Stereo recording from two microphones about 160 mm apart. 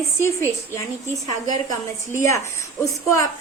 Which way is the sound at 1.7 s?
20° left (ahead or behind).